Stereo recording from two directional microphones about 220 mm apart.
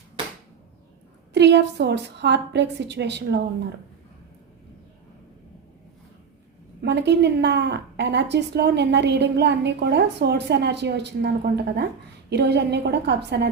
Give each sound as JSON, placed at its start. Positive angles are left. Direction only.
{"t": 1.3, "sound": "a woman's voice", "side_deg": -50}
{"t": 6.8, "sound": "a woman's voice", "side_deg": -50}